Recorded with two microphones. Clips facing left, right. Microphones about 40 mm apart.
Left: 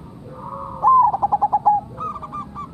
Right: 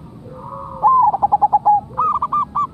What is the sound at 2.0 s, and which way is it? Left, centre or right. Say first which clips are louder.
Owl: right 12 dB; right.